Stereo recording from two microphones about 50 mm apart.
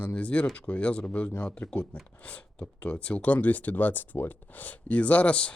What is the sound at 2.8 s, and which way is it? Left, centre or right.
Speech, left.